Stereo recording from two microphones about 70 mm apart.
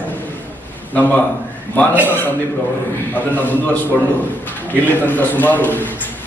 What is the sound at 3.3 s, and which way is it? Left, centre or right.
A man's voice, left.